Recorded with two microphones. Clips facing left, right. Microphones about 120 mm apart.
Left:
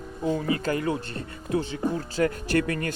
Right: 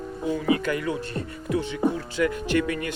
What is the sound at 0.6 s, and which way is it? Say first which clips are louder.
Speech: even; 35° left (ahead or behind).